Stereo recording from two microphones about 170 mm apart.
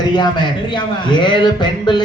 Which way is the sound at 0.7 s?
30° left (ahead or behind).